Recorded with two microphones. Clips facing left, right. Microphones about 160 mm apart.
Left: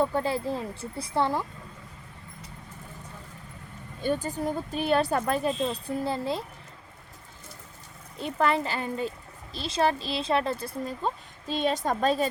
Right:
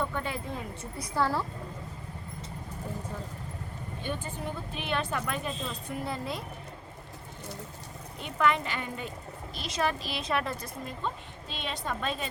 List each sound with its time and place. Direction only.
0.0 s speech: 35° left (ahead or behind)
4.0 s speech: 40° left (ahead or behind)
8.2 s speech: 35° left (ahead or behind)